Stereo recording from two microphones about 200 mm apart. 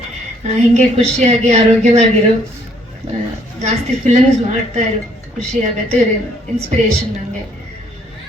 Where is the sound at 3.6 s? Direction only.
35° right (ahead or behind).